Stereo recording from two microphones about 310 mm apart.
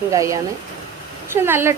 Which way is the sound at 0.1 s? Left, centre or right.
Centre.